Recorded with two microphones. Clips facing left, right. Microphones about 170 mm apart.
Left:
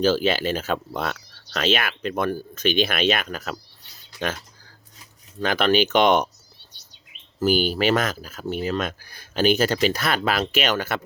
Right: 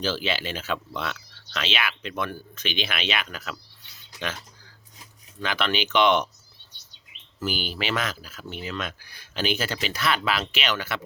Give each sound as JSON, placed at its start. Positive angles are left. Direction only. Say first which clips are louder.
{"t": 0.0, "sound": "speech", "louder": "left 8 dB", "side_deg": 45}
{"t": 5.4, "sound": "speech", "louder": "left 7 dB", "side_deg": 45}
{"t": 7.3, "sound": "speech", "louder": "left 10 dB", "side_deg": 45}